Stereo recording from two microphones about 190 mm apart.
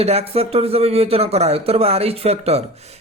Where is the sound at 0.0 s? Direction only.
30° right (ahead or behind).